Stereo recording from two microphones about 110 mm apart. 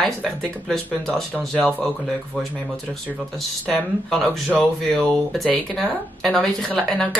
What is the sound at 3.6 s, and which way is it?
Speech, 10° left (ahead or behind).